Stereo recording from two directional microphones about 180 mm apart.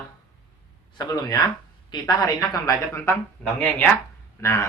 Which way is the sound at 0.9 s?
20° left (ahead or behind).